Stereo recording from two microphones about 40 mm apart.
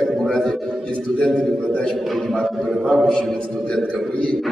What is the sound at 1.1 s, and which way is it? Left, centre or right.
Speech, left.